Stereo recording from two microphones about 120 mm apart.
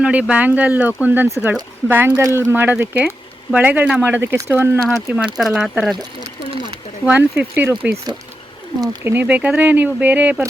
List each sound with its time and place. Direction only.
0.0 s speech: 10° right (ahead or behind)
5.2 s speech: 5° right (ahead or behind)
6.5 s a sound: 45° right (ahead or behind)
7.0 s speech: 15° right (ahead or behind)
9.0 s speech: 15° right (ahead or behind)